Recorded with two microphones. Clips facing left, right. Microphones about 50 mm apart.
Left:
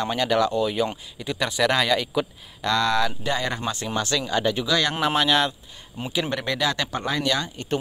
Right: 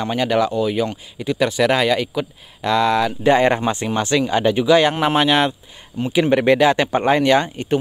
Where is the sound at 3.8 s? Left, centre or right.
Right.